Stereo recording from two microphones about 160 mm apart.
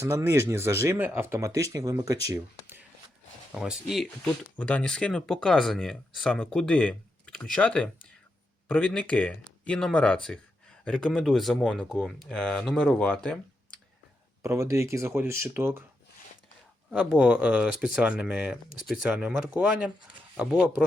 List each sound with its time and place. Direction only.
0.0 s speech: 15° right (ahead or behind)
3.5 s speech: centre (ahead or behind)
14.4 s speech: 20° right (ahead or behind)
16.9 s speech: 5° right (ahead or behind)